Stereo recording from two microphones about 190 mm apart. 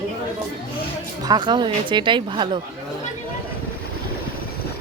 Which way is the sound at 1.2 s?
20° right (ahead or behind).